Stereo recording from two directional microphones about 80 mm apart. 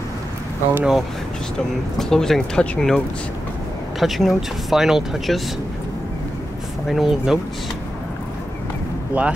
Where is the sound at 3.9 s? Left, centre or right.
Centre.